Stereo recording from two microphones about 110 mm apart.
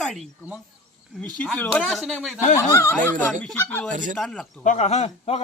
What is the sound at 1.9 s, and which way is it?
Speech, centre (ahead or behind).